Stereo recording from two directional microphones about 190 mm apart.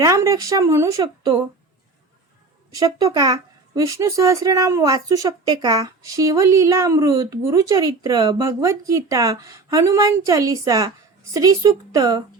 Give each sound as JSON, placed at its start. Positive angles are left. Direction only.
{"t": 0.0, "sound": "speech", "side_deg": -15}
{"t": 2.7, "sound": "speech", "side_deg": -20}